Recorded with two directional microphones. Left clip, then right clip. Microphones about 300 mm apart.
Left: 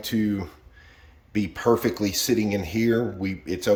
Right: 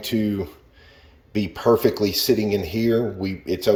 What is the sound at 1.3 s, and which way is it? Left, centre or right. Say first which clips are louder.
Speech: right 3 dB; centre.